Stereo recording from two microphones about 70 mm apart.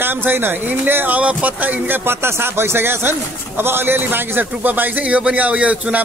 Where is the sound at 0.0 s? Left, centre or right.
Right.